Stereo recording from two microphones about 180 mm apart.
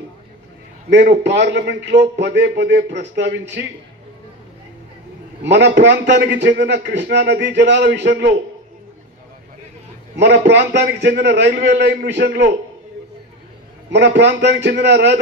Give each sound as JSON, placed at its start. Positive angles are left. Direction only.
{"t": 0.8, "sound": "a man's voice", "side_deg": -70}
{"t": 5.4, "sound": "a man's voice", "side_deg": -75}
{"t": 10.1, "sound": "a man's voice", "side_deg": -75}
{"t": 13.8, "sound": "a man's voice", "side_deg": -75}